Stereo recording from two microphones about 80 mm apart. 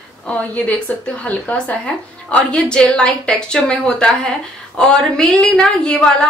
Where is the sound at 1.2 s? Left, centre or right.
Centre.